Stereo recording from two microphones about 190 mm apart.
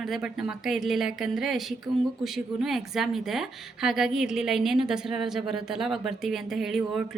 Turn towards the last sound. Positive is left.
turn(degrees=0)  # may be behind; listen again after turning